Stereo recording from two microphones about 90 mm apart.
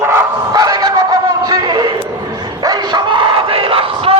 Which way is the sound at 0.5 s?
50° right (ahead or behind).